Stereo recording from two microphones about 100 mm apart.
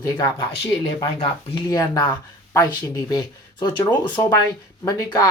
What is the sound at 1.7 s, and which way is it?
Speech, 45° left (ahead or behind).